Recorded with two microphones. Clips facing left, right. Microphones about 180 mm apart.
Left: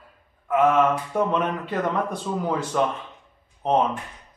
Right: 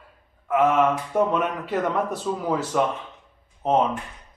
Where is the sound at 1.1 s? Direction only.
5° right (ahead or behind).